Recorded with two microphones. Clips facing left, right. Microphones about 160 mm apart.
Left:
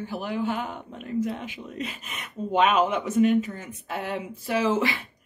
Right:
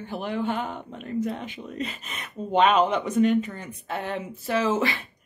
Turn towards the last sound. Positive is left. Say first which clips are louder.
# even
turn(degrees=10)  # may be behind; listen again after turning